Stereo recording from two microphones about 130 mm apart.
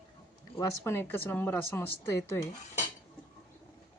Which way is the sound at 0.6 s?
20° left (ahead or behind).